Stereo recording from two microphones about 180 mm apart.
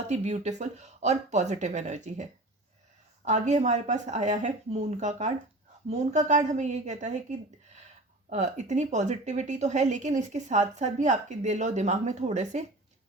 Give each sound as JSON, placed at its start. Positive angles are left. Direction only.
{"t": 0.1, "sound": "speech", "side_deg": -40}
{"t": 3.2, "sound": "speech", "side_deg": -40}